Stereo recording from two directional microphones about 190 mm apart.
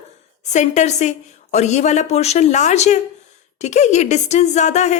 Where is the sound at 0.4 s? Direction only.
35° left (ahead or behind).